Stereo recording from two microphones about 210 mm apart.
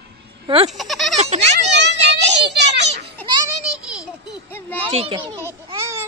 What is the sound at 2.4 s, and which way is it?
Children playing, 55° right (ahead or behind).